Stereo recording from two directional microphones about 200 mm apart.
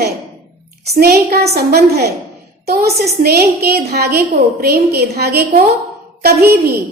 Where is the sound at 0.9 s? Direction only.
50° right (ahead or behind).